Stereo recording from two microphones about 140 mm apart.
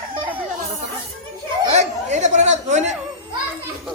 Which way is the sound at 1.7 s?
55° right (ahead or behind).